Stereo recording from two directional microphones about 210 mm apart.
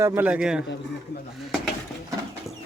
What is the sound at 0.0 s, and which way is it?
Speech, 10° right (ahead or behind).